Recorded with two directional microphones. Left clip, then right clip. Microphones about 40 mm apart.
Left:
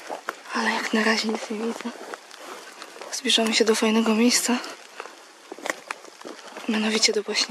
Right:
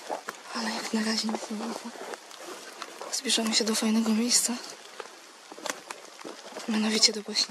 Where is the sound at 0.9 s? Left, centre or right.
Left.